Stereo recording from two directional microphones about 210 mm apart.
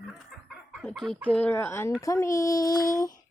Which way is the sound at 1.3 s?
5° left (ahead or behind).